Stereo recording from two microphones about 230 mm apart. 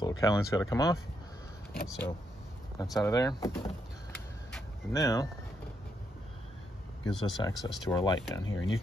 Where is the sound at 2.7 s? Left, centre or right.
Centre.